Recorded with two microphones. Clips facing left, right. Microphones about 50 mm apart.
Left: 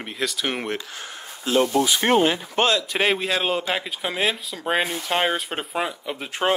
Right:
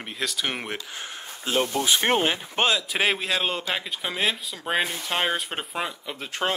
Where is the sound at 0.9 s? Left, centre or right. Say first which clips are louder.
Even; right.